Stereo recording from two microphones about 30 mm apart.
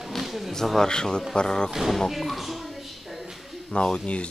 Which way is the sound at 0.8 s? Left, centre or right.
Left.